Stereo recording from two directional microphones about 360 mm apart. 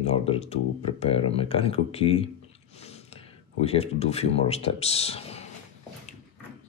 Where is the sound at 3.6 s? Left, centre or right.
Centre.